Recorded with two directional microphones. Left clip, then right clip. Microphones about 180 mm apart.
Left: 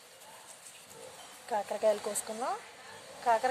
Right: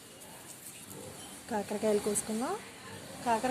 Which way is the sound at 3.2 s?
30° left (ahead or behind).